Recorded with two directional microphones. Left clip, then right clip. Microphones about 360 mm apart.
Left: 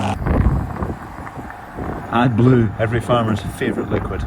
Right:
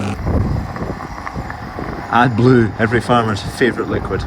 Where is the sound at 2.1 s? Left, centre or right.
Centre.